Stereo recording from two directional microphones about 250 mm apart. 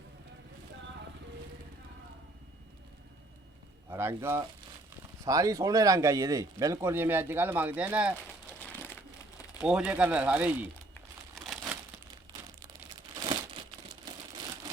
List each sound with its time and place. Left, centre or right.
3.8 s speech: centre
9.6 s speech: centre
12.9 s crumpling: centre